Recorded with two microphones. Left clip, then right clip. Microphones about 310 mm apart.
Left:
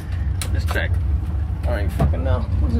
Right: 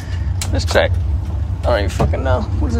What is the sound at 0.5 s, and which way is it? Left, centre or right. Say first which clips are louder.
Speech: right 11 dB; centre.